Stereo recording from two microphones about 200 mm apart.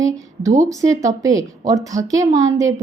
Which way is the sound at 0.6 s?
15° right (ahead or behind).